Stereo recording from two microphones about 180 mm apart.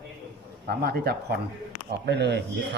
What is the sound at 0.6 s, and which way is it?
Speech, 60° right (ahead or behind).